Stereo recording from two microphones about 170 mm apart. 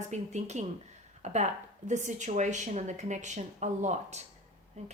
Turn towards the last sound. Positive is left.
turn(degrees=-40)  # may be behind; listen again after turning